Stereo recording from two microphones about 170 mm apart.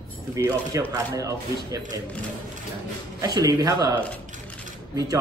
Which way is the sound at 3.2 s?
20° right (ahead or behind).